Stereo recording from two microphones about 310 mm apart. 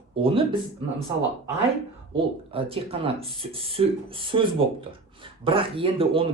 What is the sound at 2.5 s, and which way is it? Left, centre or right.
Speech, centre.